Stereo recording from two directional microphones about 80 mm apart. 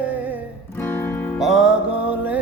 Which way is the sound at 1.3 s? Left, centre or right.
Centre.